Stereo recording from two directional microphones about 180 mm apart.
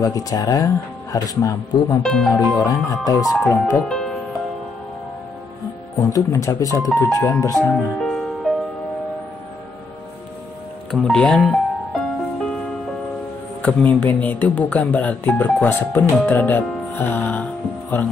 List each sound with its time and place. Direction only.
0.0 s speech: 20° left (ahead or behind)
3.8 s music: 5° left (ahead or behind)
5.9 s speech: 20° left (ahead or behind)
7.7 s music: centre (ahead or behind)
10.9 s music: 5° left (ahead or behind)
13.6 s speech: 10° left (ahead or behind)